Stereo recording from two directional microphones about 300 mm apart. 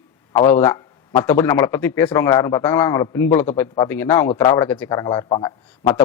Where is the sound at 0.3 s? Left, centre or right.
Centre.